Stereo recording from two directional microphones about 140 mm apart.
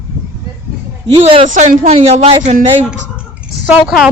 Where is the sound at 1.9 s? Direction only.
50° right (ahead or behind).